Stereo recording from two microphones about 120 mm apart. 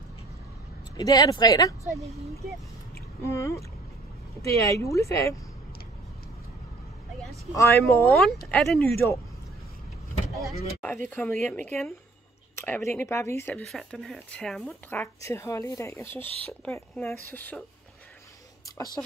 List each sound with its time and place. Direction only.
0.9 s speech: 35° left (ahead or behind)
3.2 s speech: 25° left (ahead or behind)
7.5 s speech: 25° left (ahead or behind)
8.1 s speech: 10° left (ahead or behind)
8.7 s speech: 20° left (ahead or behind)
10.8 s speech: 15° left (ahead or behind)
13.6 s speech: 5° left (ahead or behind)
15.2 s speech: 25° left (ahead or behind)
19.0 s speech: 25° left (ahead or behind)